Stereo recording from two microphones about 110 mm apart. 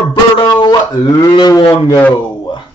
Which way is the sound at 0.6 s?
40° left (ahead or behind).